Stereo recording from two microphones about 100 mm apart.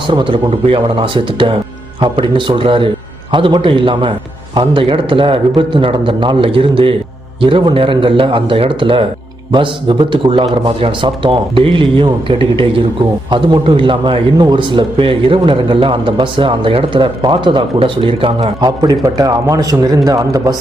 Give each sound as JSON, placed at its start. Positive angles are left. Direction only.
{"t": 0.1, "sound": "a man's voice", "side_deg": -55}
{"t": 18.6, "sound": "a man's voice", "side_deg": -40}